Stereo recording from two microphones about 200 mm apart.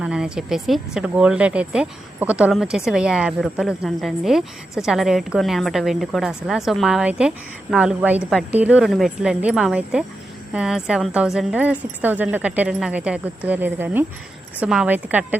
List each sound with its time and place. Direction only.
0.0 s a woman's voice: 5° right (ahead or behind)